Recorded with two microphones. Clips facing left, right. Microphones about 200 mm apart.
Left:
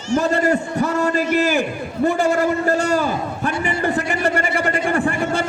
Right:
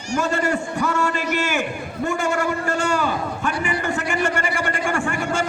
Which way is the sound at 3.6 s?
35° left (ahead or behind).